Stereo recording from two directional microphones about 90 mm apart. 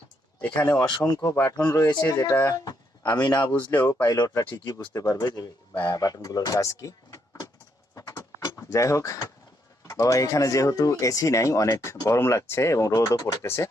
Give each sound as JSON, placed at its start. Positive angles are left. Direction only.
{"t": 0.6, "sound": "speech", "side_deg": 30}
{"t": 0.9, "sound": "speech", "side_deg": 45}
{"t": 3.8, "sound": "speech", "side_deg": 35}
{"t": 4.5, "sound": "speech", "side_deg": 45}
{"t": 8.7, "sound": "speech", "side_deg": 35}